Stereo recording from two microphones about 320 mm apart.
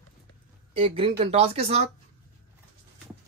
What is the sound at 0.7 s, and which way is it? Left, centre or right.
Speech, centre.